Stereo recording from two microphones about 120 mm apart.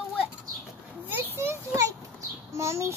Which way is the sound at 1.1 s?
20° right (ahead or behind).